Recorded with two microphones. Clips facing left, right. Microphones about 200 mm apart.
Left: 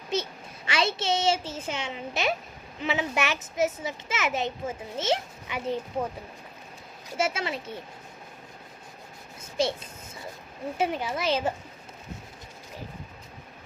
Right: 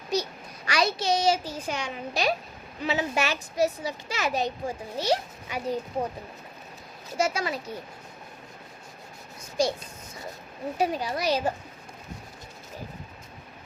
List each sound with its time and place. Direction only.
0.1 s a child's voice: 25° left (ahead or behind)
7.2 s a child's voice: 25° left (ahead or behind)
9.6 s a child's voice: 25° left (ahead or behind)